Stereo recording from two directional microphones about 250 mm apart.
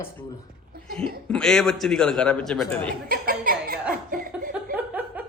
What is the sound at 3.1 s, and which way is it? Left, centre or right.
Speech, right.